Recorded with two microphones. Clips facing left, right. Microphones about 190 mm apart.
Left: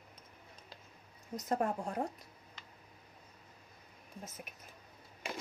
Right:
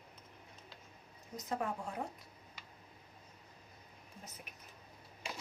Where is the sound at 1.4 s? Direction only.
45° left (ahead or behind).